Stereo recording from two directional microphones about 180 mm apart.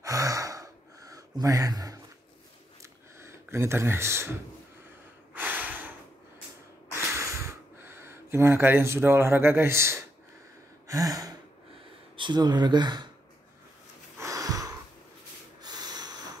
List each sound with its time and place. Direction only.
0.0 s gasp: 20° right (ahead or behind)
2.8 s a sound: 15° right (ahead or behind)
5.3 s snort: 10° right (ahead or behind)
6.9 s a sound: 15° right (ahead or behind)
10.9 s gasp: 20° right (ahead or behind)
12.2 s speech: 25° right (ahead or behind)
14.2 s wheeze: 20° right (ahead or behind)
15.6 s snort: 20° right (ahead or behind)